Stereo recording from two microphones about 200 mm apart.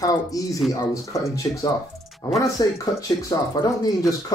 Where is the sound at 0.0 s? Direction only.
15° left (ahead or behind).